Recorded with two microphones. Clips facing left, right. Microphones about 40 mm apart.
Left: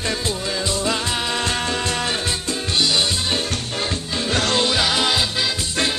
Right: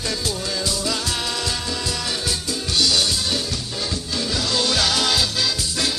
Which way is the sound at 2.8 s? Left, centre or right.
Left.